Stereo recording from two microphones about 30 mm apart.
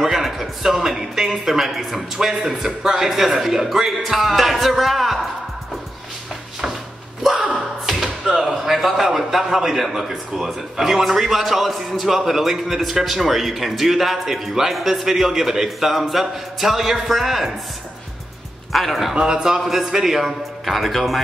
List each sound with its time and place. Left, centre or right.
0.0 s a sound: centre
0.7 s a man's voice: centre
2.6 s a man's voice: centre
7.5 s a sound: centre
8.4 s a man's voice: centre
18.7 s a man's voice: centre
19.1 s a man's voice: right
19.6 s a man's voice: centre